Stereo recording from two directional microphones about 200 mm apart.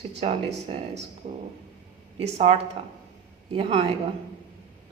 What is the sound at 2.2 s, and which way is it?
A woman's voice, 35° right (ahead or behind).